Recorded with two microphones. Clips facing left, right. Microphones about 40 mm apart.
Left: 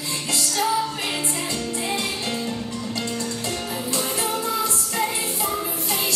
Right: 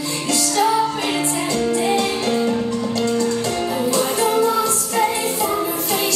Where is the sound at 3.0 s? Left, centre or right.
Centre.